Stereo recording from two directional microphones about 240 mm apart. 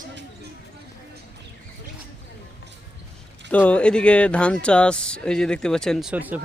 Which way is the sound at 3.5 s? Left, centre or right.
Centre.